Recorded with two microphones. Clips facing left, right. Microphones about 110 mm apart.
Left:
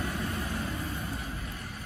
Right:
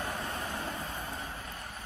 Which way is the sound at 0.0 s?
30° right (ahead or behind).